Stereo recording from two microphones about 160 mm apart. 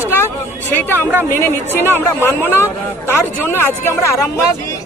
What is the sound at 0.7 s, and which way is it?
Speech, 10° left (ahead or behind).